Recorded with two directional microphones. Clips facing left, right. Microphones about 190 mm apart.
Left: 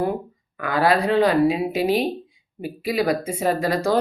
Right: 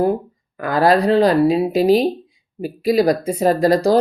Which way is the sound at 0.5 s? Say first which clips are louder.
Right 4 dB; 40° right (ahead or behind).